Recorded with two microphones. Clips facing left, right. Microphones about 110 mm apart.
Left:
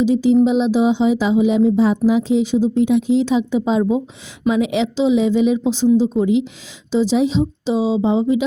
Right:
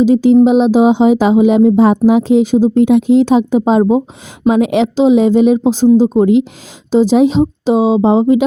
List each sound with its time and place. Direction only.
0.0 s a woman's voice: 50° right (ahead or behind)